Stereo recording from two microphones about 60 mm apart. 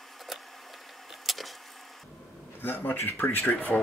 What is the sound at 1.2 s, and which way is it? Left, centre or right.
Vehicle, centre.